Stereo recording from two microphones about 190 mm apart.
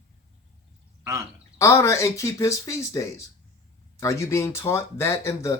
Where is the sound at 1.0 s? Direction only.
15° right (ahead or behind).